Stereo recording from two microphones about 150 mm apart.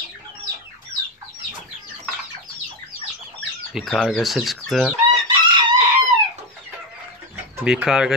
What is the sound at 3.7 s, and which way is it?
Speech, centre (ahead or behind).